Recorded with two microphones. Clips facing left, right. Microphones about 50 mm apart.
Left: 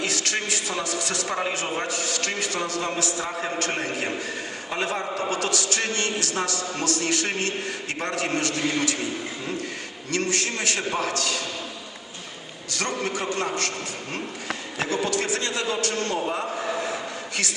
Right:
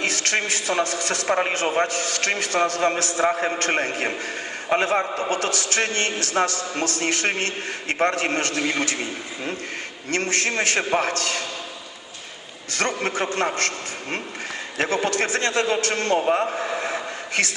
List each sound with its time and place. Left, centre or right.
0.0 s a man's voice: right
10.1 s a man's voice: right
13.0 s a man's voice: right